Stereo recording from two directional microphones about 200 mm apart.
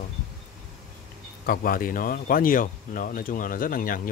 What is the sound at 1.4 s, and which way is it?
Speech, 50° left (ahead or behind).